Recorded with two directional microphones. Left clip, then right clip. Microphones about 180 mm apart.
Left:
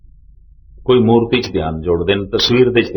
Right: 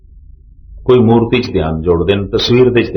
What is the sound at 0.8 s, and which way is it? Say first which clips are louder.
Speech: right 2 dB; 25° left (ahead or behind).